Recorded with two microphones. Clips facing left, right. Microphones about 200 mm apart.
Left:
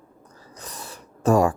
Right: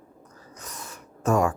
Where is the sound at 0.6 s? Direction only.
35° left (ahead or behind).